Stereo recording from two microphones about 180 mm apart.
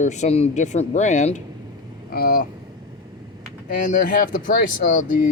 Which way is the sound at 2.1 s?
55° left (ahead or behind).